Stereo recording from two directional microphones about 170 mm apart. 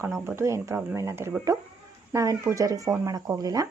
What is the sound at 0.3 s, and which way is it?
Speech, 15° right (ahead or behind).